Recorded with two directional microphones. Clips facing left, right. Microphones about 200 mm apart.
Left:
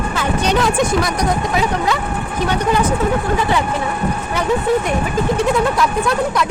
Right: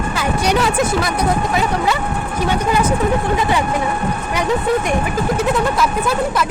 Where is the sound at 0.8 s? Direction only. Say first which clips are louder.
Left 1 dB; 5° right (ahead or behind).